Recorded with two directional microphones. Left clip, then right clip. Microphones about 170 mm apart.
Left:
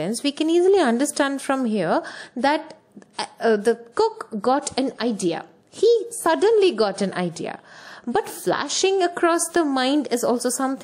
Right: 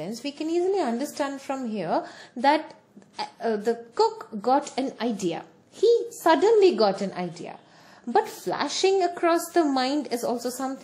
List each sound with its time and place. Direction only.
0.0 s a woman's voice: 30° left (ahead or behind)
4.8 s a woman's voice: 15° left (ahead or behind)